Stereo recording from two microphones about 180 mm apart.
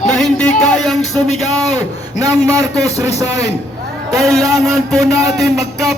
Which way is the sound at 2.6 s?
20° right (ahead or behind).